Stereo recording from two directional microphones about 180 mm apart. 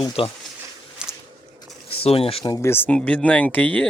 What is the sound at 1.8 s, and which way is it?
Speech, 30° left (ahead or behind).